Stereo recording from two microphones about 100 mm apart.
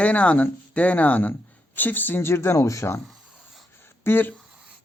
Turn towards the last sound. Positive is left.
turn(degrees=20)  # may be behind; listen again after turning